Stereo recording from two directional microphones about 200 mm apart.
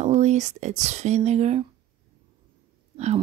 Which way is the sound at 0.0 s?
35° right (ahead or behind).